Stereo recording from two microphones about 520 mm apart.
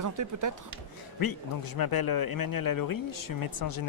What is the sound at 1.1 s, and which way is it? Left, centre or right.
A man's voice, left.